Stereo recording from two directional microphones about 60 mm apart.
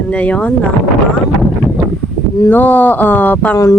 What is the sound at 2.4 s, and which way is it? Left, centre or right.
Speech, left.